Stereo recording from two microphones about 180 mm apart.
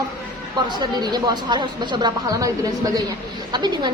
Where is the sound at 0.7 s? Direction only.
25° right (ahead or behind).